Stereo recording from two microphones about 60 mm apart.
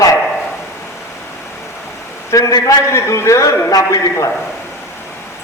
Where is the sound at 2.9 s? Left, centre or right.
Left.